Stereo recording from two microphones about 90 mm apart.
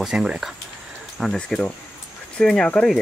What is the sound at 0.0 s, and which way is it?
Speech, 5° right (ahead or behind).